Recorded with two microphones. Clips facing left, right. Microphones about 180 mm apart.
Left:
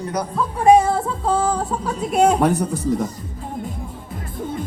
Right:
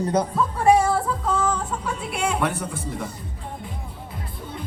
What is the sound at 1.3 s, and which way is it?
Speech, 35° left (ahead or behind).